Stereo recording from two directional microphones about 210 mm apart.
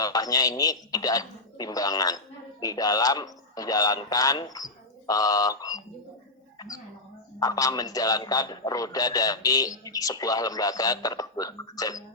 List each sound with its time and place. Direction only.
0.0 s a man's voice: 15° left (ahead or behind)